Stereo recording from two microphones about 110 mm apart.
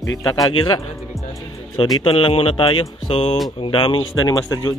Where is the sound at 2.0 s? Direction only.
55° left (ahead or behind); by 4.7 s 35° left (ahead or behind).